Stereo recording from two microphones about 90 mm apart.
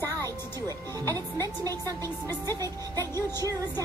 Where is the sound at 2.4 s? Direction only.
45° right (ahead or behind).